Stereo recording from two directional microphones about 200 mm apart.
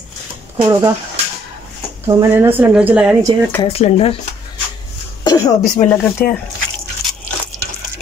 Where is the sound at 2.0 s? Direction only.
15° right (ahead or behind).